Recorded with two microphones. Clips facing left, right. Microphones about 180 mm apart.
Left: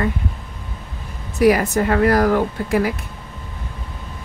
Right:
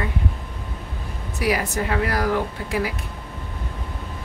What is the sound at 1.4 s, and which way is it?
Speech, 50° left (ahead or behind).